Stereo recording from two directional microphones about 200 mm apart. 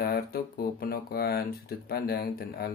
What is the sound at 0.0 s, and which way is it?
Speech, 50° left (ahead or behind).